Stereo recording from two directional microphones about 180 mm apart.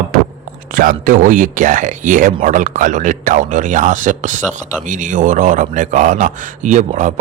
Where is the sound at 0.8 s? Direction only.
50° right (ahead or behind).